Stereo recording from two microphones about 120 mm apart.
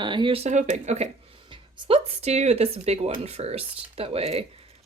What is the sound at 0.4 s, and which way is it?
Speech, 85° right.